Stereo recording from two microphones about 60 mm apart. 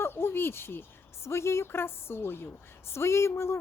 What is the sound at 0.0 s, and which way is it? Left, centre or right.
A woman's voice, left.